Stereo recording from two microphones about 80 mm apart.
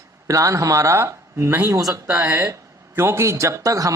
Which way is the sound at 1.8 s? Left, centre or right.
Right.